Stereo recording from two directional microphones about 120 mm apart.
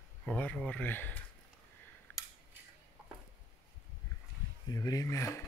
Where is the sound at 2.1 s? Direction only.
15° left (ahead or behind).